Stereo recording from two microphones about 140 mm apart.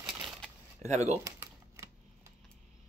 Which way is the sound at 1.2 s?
20° right (ahead or behind).